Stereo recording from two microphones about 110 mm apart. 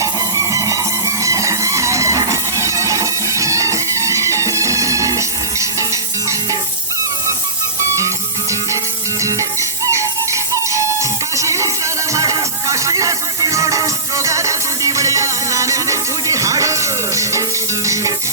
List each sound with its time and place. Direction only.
0.0 s music: 30° right (ahead or behind)
7.9 s music: 30° right (ahead or behind)